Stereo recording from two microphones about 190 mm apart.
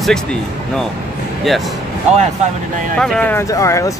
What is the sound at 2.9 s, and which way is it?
Speech, 5° left (ahead or behind).